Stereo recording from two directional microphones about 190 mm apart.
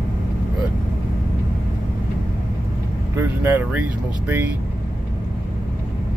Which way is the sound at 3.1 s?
10° right (ahead or behind).